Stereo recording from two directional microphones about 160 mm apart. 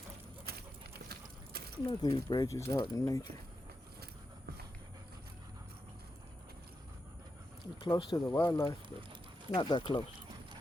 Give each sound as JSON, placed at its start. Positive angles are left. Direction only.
{"t": 0.5, "sound": "horse", "side_deg": -80}
{"t": 1.8, "sound": "speech", "side_deg": 25}
{"t": 7.8, "sound": "speech", "side_deg": 30}
{"t": 9.6, "sound": "speech", "side_deg": 25}